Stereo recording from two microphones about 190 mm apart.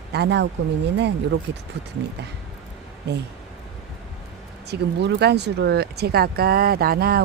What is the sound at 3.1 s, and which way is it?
Speech, 60° right (ahead or behind).